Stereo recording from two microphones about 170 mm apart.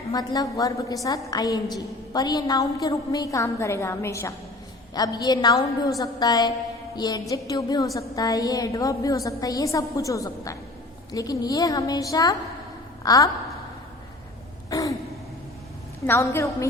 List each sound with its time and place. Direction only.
0.1 s a woman's voice: 20° left (ahead or behind)
14.7 s gasp: 20° left (ahead or behind)
16.0 s a woman's voice: 15° left (ahead or behind)